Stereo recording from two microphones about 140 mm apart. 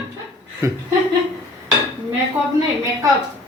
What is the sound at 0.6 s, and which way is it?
Speech, 25° right (ahead or behind).